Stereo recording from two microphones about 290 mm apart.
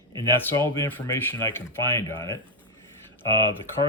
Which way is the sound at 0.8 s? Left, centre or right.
Centre.